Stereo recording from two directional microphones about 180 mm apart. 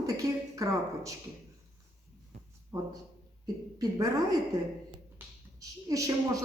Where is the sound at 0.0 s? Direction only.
20° right (ahead or behind).